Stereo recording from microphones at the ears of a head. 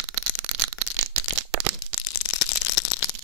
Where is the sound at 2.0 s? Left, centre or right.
Left.